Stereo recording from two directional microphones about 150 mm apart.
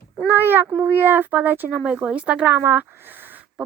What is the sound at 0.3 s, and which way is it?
Speech, 15° right (ahead or behind).